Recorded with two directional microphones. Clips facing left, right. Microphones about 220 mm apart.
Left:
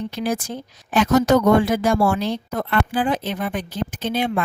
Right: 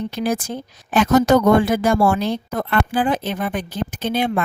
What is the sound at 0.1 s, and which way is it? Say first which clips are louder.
A woman's voice: right 2 dB; 55° right (ahead or behind).